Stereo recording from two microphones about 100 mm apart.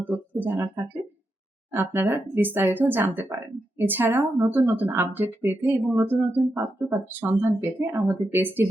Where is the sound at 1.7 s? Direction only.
20° right (ahead or behind).